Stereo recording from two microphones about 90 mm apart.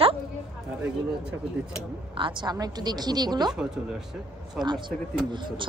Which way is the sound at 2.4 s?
50° right (ahead or behind).